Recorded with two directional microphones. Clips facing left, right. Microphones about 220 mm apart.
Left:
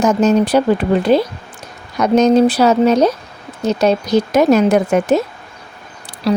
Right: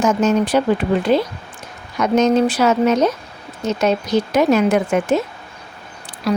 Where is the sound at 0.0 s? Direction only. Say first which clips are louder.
Left 3 dB; 35° left (ahead or behind).